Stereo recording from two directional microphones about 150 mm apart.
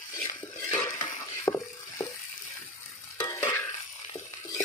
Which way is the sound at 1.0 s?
20° left (ahead or behind).